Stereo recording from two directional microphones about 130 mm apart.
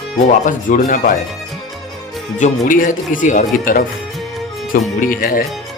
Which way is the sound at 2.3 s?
80° left.